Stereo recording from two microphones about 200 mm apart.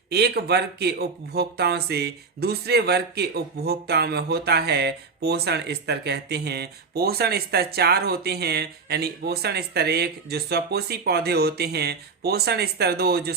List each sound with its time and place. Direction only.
0.1 s speech: 55° right (ahead or behind)